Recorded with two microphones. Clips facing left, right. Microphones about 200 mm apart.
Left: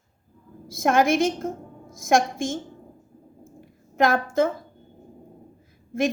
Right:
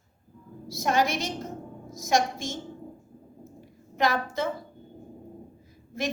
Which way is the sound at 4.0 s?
50° left (ahead or behind).